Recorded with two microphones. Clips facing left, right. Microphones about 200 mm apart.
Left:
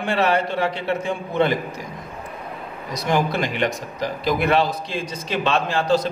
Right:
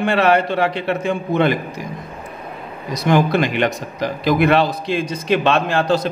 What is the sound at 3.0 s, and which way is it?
A man's voice, 70° right (ahead or behind).